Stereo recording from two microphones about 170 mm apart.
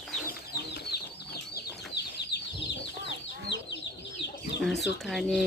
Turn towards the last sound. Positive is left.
turn(degrees=0)  # may be behind; listen again after turning